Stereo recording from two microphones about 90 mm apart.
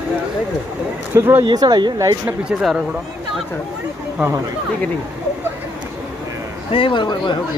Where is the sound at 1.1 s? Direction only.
25° right (ahead or behind).